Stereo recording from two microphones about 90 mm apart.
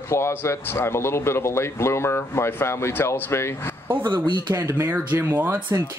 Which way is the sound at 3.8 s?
25° right (ahead or behind).